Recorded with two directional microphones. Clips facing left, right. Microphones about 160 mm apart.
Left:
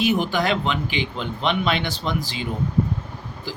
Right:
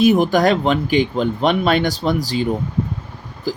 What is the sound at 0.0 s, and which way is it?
Speech, 40° right (ahead or behind).